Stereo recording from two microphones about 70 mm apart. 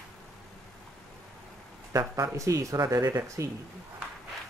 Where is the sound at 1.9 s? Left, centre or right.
Right.